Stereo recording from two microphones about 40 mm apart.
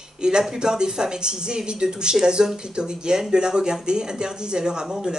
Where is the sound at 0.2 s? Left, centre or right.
Centre.